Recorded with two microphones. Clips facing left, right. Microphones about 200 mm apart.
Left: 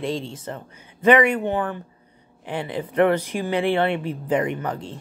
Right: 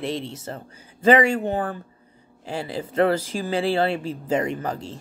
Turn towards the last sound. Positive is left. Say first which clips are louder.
# left 1 dB
turn(degrees=-25)  # may be behind; listen again after turning